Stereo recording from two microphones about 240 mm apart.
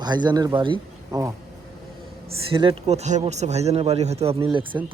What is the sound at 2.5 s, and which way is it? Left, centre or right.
A man's voice, right.